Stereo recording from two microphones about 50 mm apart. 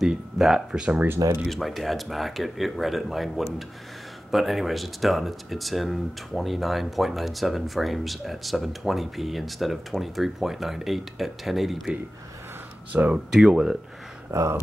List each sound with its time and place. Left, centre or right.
0.0 s speech: centre
1.0 s speech: right
1.5 s speech: centre
12.9 s speech: right
13.3 s speech: centre
14.3 s speech: right